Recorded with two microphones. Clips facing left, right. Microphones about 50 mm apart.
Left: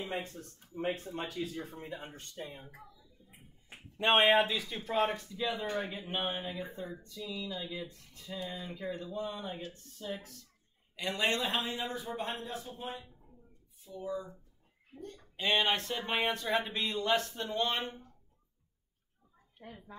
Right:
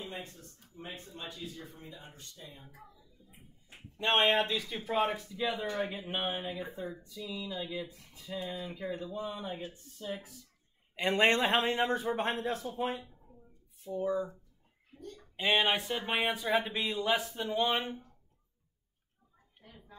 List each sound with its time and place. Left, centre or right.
0.0 s speech: left
2.8 s speech: right
4.2 s speech: centre
8.8 s speech: centre
11.0 s a man's voice: right
13.8 s a man's voice: right
15.3 s speech: centre
19.6 s speech: left